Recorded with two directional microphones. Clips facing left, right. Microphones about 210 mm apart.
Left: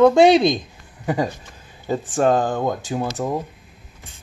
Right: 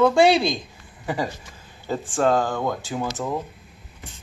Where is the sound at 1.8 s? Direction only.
15° left (ahead or behind).